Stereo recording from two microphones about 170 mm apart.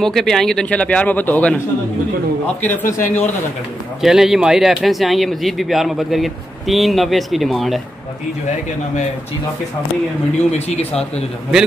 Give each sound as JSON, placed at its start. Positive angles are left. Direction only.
{"t": 0.0, "sound": "speech", "side_deg": 0}
{"t": 4.0, "sound": "a man's voice", "side_deg": -5}
{"t": 10.5, "sound": "speech", "side_deg": 40}